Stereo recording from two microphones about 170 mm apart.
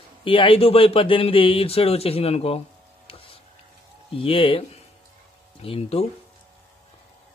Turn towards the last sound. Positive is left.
turn(degrees=35)  # may be behind; listen again after turning